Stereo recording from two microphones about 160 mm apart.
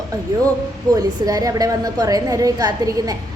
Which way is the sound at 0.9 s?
25° right (ahead or behind).